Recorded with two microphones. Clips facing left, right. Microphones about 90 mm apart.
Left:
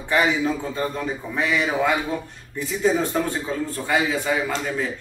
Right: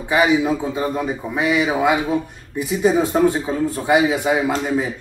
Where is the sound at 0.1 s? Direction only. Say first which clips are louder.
Right 4 dB; 10° right (ahead or behind).